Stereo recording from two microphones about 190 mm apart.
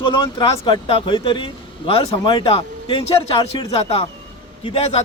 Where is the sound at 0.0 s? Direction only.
25° left (ahead or behind).